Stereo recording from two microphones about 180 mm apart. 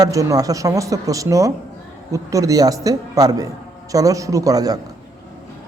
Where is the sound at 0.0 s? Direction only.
20° right (ahead or behind).